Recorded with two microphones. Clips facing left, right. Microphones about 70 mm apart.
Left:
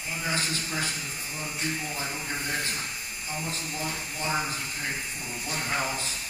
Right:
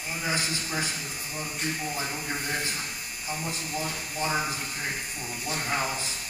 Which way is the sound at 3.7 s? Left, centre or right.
Right.